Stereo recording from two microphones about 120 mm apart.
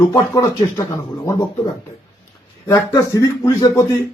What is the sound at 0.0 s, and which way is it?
Speech, 30° left (ahead or behind).